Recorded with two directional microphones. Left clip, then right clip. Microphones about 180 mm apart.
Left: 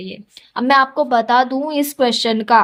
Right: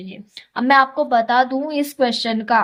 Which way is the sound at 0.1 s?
35° left (ahead or behind).